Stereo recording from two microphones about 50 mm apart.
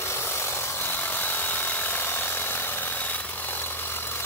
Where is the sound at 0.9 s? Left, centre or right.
Left.